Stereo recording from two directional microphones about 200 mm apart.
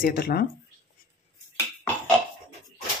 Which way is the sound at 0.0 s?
50° left (ahead or behind).